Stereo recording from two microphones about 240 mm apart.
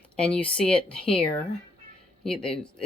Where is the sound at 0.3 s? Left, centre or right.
Centre.